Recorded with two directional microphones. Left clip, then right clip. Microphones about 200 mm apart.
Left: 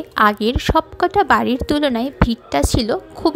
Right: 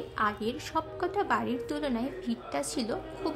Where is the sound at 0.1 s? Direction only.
40° left (ahead or behind).